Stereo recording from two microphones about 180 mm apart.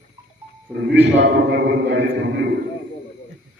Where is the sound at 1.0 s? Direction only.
75° right (ahead or behind).